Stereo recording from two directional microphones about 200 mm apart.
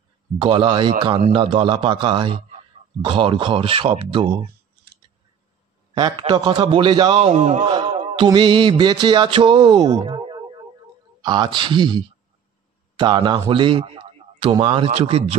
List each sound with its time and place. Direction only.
0.4 s a man's voice: 25° right (ahead or behind)
5.9 s a man's voice: 20° right (ahead or behind)